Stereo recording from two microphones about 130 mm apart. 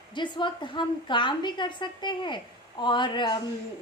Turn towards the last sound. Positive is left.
turn(degrees=35)  # may be behind; listen again after turning